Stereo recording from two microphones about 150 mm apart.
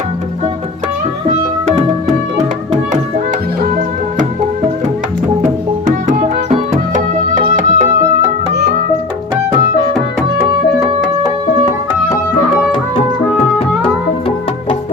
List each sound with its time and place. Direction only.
6.1 s music: 50° right (ahead or behind)